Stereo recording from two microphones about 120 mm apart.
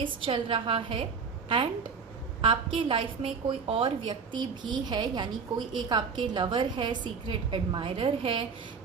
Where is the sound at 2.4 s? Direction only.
50° right (ahead or behind).